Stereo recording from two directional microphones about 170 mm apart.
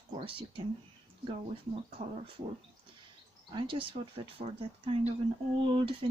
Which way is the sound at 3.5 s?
30° right (ahead or behind).